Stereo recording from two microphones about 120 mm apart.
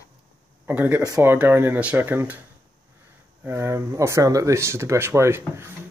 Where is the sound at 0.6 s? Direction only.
15° right (ahead or behind).